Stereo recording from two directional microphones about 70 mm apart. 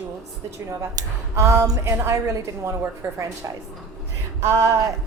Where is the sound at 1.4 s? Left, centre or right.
Right.